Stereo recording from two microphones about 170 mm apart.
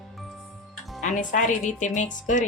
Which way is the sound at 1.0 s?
45° left (ahead or behind).